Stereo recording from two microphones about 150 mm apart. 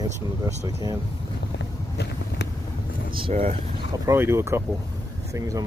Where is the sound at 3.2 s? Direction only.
40° right (ahead or behind).